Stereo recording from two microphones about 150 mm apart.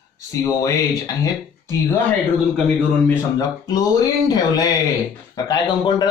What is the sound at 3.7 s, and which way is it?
A man's voice, 25° left (ahead or behind).